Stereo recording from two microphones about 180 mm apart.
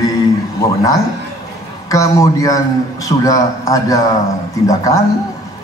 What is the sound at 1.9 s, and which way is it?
A man's voice, 20° left (ahead or behind).